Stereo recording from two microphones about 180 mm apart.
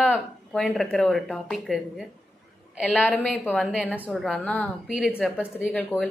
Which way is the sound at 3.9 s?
10° left (ahead or behind).